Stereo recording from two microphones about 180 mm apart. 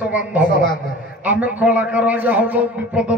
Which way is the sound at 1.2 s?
10° right (ahead or behind).